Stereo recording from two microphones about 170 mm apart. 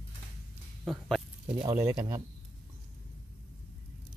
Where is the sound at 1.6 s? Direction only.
20° right (ahead or behind).